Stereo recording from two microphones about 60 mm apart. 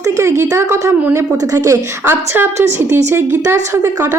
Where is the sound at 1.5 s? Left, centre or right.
Right.